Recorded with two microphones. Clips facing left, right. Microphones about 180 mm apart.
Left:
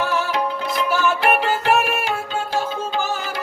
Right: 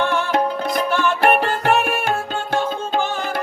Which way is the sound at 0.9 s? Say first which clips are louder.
Left 2 dB; 5° left (ahead or behind).